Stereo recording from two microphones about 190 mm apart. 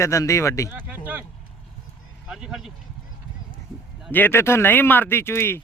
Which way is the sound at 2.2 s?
5° right (ahead or behind).